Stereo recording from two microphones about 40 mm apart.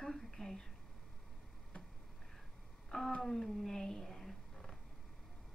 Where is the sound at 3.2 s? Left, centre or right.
Centre.